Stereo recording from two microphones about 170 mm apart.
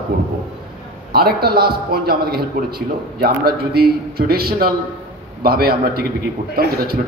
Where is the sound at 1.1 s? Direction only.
65° right (ahead or behind).